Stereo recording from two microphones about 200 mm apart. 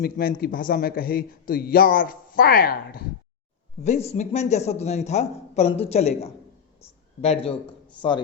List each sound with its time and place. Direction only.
0.0 s a man's voice: 45° left (ahead or behind)
3.8 s a man's voice: 35° left (ahead or behind)